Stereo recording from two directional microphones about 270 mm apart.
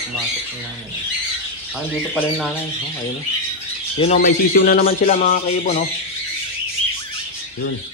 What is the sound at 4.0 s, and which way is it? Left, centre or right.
Speech, left.